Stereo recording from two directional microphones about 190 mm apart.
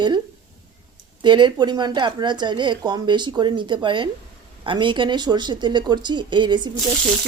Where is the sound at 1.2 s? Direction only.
25° right (ahead or behind).